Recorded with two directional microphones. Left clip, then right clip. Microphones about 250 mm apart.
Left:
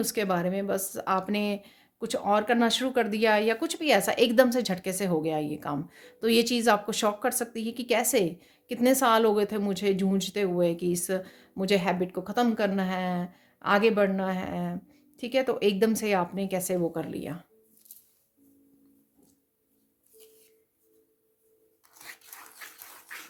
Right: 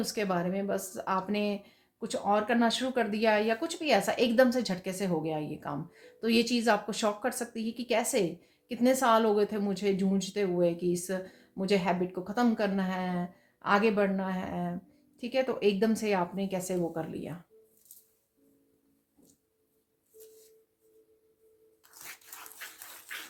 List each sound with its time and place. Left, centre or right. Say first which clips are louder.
0.0 s speech: left 4 dB; left